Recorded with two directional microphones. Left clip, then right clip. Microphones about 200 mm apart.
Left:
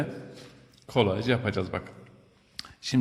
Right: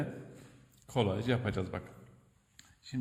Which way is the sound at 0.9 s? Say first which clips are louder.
Left 7 dB; 5° left (ahead or behind).